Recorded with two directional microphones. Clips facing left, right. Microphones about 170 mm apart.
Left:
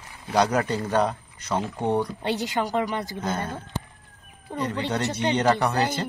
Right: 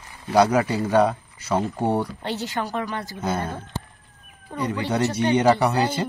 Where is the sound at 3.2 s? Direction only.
10° right (ahead or behind).